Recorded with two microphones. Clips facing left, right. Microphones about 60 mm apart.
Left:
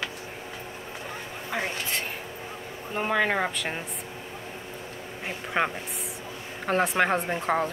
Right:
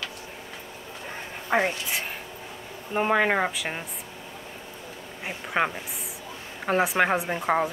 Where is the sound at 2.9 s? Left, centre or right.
Centre.